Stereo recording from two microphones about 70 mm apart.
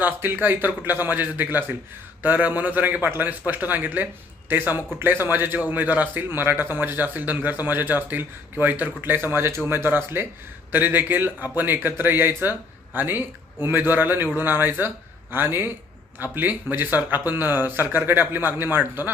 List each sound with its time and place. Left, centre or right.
0.0 s a man's voice: right